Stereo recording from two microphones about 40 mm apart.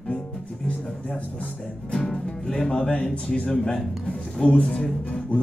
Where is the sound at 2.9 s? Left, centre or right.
Left.